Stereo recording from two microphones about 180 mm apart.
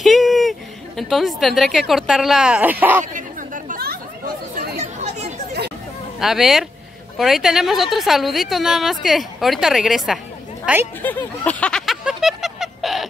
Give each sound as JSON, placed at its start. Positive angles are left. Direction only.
{"t": 0.0, "sound": "a woman's voice", "side_deg": 0}
{"t": 3.0, "sound": "chatter", "side_deg": -45}
{"t": 4.7, "sound": "chatter", "side_deg": -35}
{"t": 6.1, "sound": "a woman's voice", "side_deg": 0}
{"t": 11.0, "sound": "a sound", "side_deg": 10}